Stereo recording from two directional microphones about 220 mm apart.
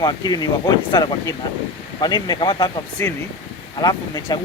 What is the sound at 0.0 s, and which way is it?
Speech, 20° left (ahead or behind).